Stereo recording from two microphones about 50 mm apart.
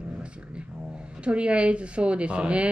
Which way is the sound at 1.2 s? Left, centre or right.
Right.